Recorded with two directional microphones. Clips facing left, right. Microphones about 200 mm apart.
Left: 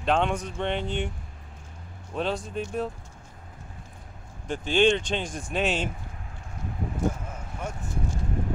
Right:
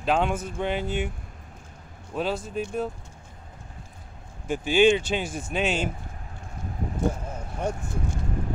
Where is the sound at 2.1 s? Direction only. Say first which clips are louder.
Right 1 dB; 5° right (ahead or behind).